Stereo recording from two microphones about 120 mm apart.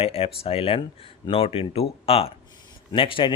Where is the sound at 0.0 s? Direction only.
55° left (ahead or behind).